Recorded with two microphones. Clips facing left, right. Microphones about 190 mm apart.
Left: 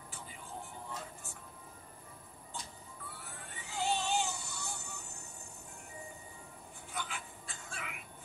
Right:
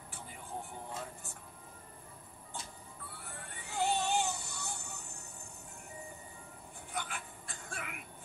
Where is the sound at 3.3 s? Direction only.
55° right (ahead or behind).